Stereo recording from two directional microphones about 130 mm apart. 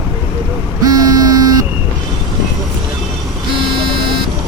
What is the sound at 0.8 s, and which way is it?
Buzzer, 30° right (ahead or behind).